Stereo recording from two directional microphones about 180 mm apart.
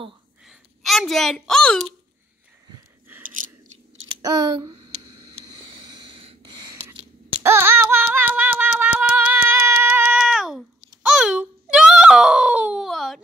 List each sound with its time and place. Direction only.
0.5 s a woman's voice: centre (ahead or behind)
4.1 s speech: 25° right (ahead or behind)
6.1 s a sound: 30° right (ahead or behind); by 13.2 s centre (ahead or behind)